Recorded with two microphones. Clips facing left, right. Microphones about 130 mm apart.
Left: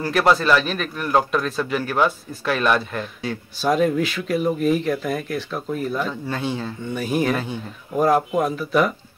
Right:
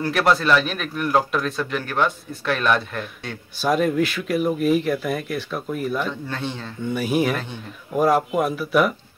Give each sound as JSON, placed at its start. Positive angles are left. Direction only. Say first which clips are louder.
{"t": 0.0, "sound": "speech", "louder": "left 1 dB", "side_deg": 0}
{"t": 7.0, "sound": "speech", "louder": "even", "side_deg": -5}